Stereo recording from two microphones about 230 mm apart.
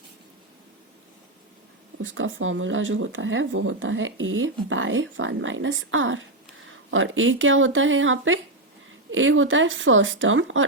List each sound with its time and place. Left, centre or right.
2.0 s speech: right